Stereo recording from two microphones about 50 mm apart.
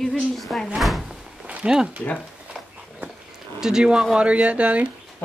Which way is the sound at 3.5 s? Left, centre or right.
Centre.